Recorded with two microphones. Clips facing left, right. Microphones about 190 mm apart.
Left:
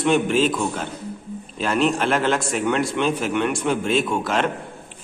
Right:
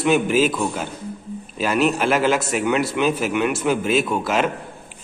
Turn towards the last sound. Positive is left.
turn(degrees=-5)  # may be behind; listen again after turning